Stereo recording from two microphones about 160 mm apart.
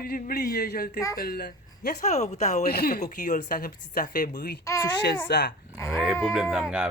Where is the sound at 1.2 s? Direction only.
75° left (ahead or behind).